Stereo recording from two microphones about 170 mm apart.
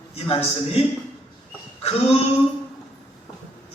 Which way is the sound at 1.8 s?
35° left (ahead or behind).